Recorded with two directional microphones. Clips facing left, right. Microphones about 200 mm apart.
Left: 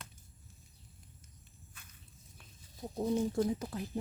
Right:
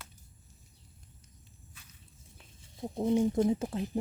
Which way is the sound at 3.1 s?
20° right (ahead or behind).